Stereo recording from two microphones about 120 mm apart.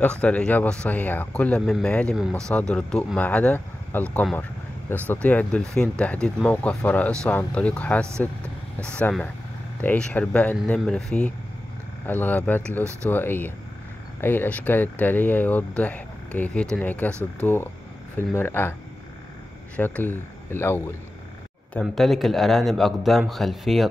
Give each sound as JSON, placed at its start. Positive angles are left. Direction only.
{"t": 0.0, "sound": "speech", "side_deg": 10}
{"t": 2.1, "sound": "a man's voice", "side_deg": -5}
{"t": 2.7, "sound": "speech", "side_deg": 10}
{"t": 19.8, "sound": "speech", "side_deg": 15}
{"t": 21.8, "sound": "a man's voice", "side_deg": 0}